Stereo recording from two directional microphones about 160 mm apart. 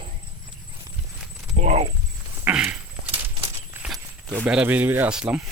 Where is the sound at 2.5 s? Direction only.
5° right (ahead or behind).